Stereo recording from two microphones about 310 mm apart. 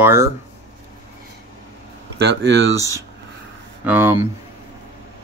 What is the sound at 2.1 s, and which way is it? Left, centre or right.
Speech, right.